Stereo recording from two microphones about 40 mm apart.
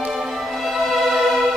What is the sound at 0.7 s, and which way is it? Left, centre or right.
Music, centre.